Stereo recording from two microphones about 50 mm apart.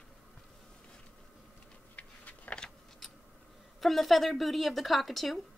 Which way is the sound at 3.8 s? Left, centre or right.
Centre.